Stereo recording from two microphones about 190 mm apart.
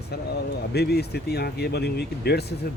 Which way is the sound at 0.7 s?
60° left (ahead or behind).